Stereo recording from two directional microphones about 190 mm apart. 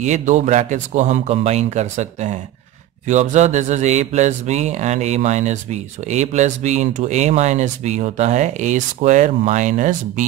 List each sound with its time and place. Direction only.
0.0 s speech: 40° right (ahead or behind)